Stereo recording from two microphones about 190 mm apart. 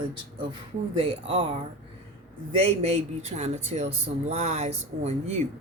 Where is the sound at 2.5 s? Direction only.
35° right (ahead or behind).